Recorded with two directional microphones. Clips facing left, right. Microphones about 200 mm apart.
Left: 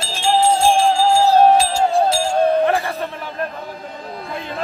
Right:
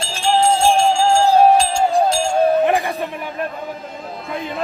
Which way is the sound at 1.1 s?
5° left (ahead or behind).